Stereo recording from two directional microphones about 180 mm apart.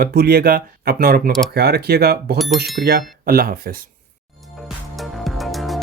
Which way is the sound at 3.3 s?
55° right (ahead or behind).